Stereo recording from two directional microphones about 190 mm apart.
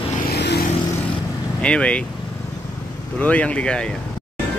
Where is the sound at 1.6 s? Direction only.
5° left (ahead or behind).